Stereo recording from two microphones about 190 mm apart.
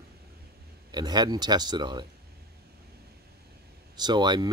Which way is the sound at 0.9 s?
20° right (ahead or behind).